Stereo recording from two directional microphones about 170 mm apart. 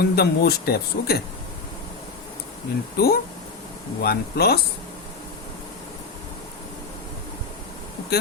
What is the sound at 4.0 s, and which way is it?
Speech, 70° left (ahead or behind).